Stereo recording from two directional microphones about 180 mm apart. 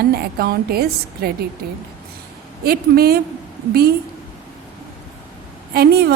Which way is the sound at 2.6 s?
60° right (ahead or behind).